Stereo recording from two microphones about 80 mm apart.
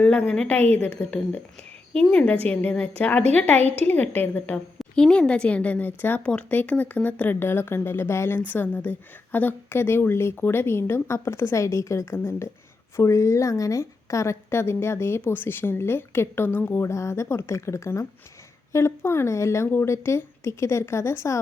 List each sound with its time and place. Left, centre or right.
0.0 s a woman's voice: centre
4.8 s a woman's voice: centre; by 8.4 s left
8.4 s a woman's voice: left
16.9 s a woman's voice: left